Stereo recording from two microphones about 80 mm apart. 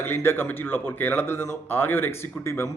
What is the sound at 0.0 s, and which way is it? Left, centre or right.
A man's voice, left.